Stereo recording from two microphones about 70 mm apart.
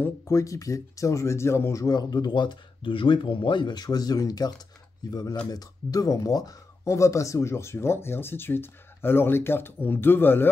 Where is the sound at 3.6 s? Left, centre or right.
Left.